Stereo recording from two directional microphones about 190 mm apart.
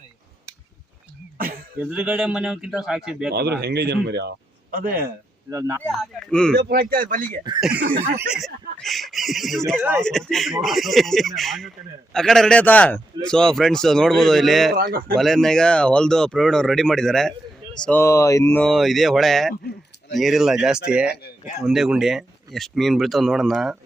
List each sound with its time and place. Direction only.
1.8 s speech: 5° right (ahead or behind)
3.2 s a man's voice: 55° right (ahead or behind)
5.5 s a man's voice: 15° right (ahead or behind)
5.8 s speech: 5° left (ahead or behind)
6.6 s speech: 55° right (ahead or behind)
8.3 s speech: centre (ahead or behind)
14.7 s speech: 50° right (ahead or behind)
15.1 s speech: centre (ahead or behind)
21.1 s speech: 55° left (ahead or behind)
21.6 s speech: centre (ahead or behind)